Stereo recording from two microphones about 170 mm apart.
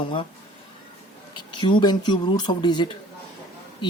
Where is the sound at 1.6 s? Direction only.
25° left (ahead or behind).